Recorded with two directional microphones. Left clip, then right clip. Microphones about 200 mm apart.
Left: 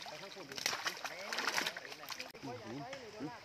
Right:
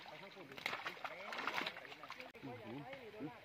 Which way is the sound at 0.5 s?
5° right (ahead or behind).